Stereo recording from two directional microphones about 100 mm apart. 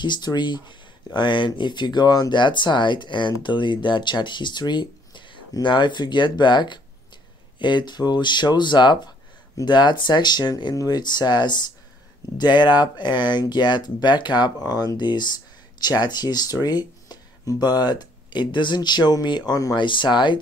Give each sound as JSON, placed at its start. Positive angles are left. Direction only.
{"t": 0.0, "sound": "speech", "side_deg": 45}